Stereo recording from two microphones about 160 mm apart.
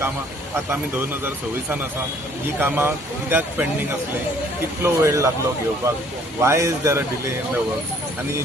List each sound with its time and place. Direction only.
2.6 s speech: 15° right (ahead or behind)
4.8 s speech: 20° right (ahead or behind)
6.4 s speech: 15° right (ahead or behind)